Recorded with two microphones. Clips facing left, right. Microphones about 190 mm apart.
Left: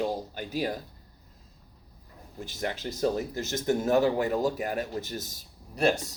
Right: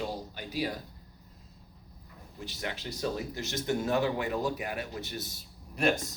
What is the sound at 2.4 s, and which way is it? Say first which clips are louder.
A man's voice: left 5 dB; 45° left (ahead or behind).